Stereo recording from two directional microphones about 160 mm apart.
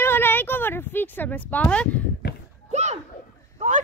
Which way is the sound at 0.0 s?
15° left (ahead or behind).